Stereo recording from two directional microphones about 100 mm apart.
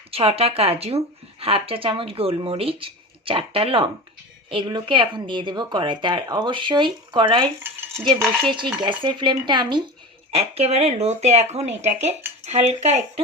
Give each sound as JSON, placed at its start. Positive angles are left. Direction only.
{"t": 0.1, "sound": "speech", "side_deg": -75}
{"t": 4.4, "sound": "speech", "side_deg": -55}
{"t": 10.3, "sound": "speech", "side_deg": -90}